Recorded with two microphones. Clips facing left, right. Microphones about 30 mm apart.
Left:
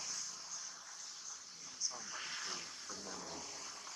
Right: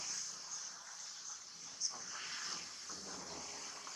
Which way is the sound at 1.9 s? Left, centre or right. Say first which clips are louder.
Left 2 dB; centre.